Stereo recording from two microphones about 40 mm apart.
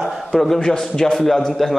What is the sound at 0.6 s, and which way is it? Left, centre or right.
A man's voice, centre.